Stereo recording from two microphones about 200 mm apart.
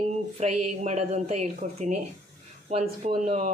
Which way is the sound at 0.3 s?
35° right (ahead or behind).